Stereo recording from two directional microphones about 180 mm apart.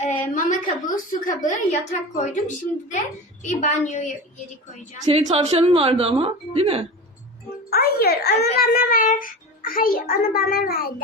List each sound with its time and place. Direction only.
0.0 s a woman's voice: 40° left (ahead or behind)
3.4 s a woman's voice: 40° left (ahead or behind)
5.0 s a woman's voice: 35° right (ahead or behind)
7.7 s a child's voice: 60° left (ahead or behind)